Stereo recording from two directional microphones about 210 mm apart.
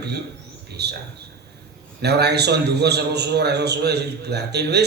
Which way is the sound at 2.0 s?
50° right (ahead or behind).